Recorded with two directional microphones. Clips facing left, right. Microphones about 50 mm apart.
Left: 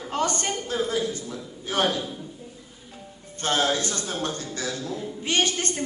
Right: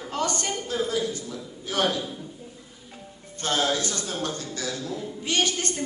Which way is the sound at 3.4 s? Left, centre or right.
Left.